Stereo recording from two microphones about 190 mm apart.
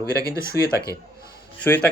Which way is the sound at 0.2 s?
15° right (ahead or behind).